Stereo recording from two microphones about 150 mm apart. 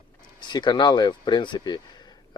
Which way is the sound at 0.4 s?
30° left (ahead or behind).